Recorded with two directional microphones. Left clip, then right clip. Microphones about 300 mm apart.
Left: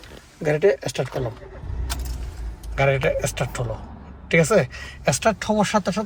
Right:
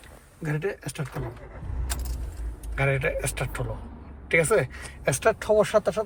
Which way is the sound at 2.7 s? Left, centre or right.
Centre.